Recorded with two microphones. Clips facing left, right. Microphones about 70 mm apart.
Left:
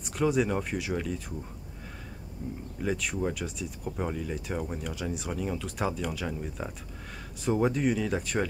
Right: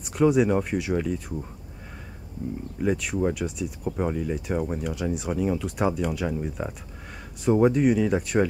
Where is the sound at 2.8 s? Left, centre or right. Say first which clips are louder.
Right 6 dB; centre.